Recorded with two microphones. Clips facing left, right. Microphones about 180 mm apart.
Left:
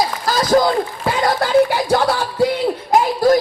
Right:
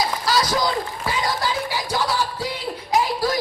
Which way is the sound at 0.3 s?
50° left (ahead or behind).